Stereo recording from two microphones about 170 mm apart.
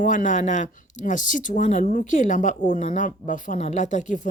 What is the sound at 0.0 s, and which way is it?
Speech, 50° left (ahead or behind).